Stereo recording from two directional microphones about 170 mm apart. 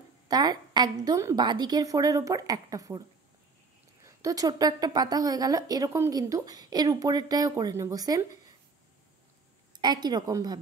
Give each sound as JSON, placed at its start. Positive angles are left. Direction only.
{"t": 0.3, "sound": "a woman's voice", "side_deg": -25}
{"t": 4.0, "sound": "a woman's voice", "side_deg": -20}
{"t": 9.7, "sound": "a woman's voice", "side_deg": -25}